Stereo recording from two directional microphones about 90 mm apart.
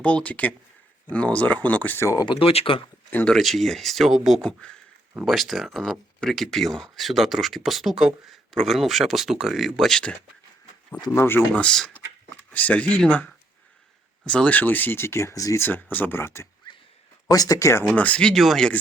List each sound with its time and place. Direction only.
0.0 s speech: 15° left (ahead or behind)
2.2 s speech: 75° left (ahead or behind)
3.3 s speech: centre (ahead or behind)
4.4 s speech: 10° left (ahead or behind)
11.1 s speech: 30° left (ahead or behind)
11.3 s speech: 10° left (ahead or behind); by 15.6 s 40° left (ahead or behind)
15.6 s speech: 20° left (ahead or behind)
17.2 s speech: 45° left (ahead or behind)
17.8 s speech: 15° left (ahead or behind)